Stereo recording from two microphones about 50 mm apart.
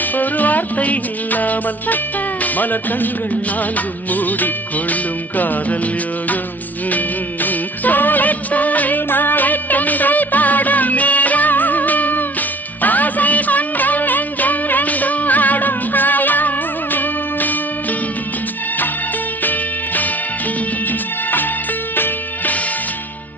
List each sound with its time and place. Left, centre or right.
0.2 s music: left
3.8 s music of bollywood: left
7.4 s music: left
21.9 s music: left